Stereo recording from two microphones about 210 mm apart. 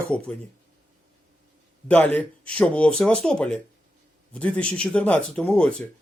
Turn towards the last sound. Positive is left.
turn(degrees=5)  # may be behind; listen again after turning